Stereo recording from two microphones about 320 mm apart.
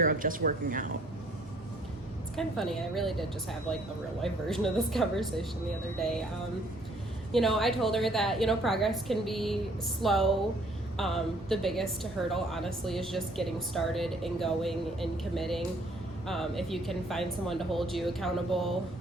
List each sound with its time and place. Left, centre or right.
0.1 s speech: right
2.3 s a woman's voice: centre
7.3 s a woman's voice: centre